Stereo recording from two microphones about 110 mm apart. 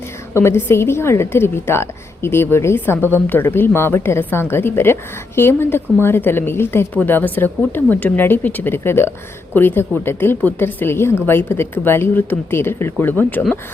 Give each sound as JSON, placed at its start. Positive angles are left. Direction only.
{"t": 0.3, "sound": "a woman's voice", "side_deg": 25}